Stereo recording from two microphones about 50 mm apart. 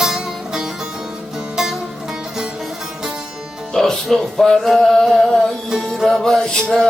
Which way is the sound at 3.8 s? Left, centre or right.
Centre.